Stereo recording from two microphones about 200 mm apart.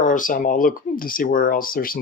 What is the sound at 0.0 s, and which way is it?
Speech, 40° left (ahead or behind).